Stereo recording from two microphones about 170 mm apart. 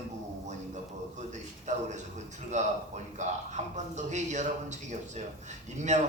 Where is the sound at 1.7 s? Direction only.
45° right (ahead or behind).